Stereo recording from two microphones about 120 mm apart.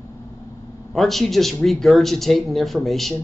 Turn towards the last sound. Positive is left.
turn(degrees=0)  # may be behind; listen again after turning